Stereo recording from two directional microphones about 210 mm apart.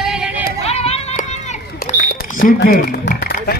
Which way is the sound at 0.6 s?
30° left (ahead or behind).